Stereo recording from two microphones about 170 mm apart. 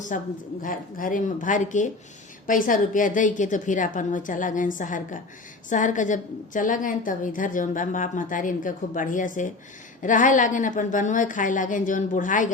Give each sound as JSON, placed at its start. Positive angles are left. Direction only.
{"t": 0.1, "sound": "a woman's voice", "side_deg": 50}